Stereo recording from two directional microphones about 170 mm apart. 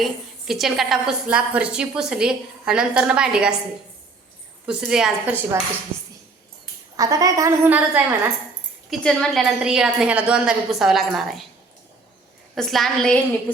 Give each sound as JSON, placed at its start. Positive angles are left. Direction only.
{"t": 0.0, "sound": "a woman's voice", "side_deg": 0}
{"t": 4.6, "sound": "a woman's voice", "side_deg": -5}
{"t": 5.9, "sound": "a woman's voice", "side_deg": 5}
{"t": 6.9, "sound": "a woman's voice", "side_deg": -20}
{"t": 8.9, "sound": "a woman's voice", "side_deg": 0}
{"t": 12.5, "sound": "a woman's voice", "side_deg": 0}